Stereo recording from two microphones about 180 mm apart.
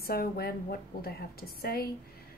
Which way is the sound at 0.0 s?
55° left (ahead or behind).